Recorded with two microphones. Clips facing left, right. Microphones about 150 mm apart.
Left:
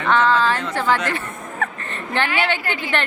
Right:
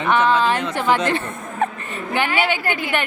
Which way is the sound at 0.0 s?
15° right (ahead or behind).